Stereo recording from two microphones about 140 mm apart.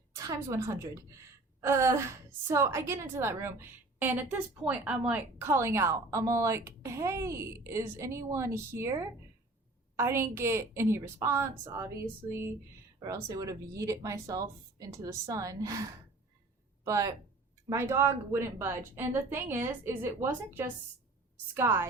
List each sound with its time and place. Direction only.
0.1 s a woman's voice: 25° right (ahead or behind)